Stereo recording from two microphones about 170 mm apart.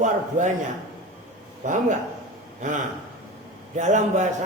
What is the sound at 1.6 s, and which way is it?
Speech, 50° right (ahead or behind).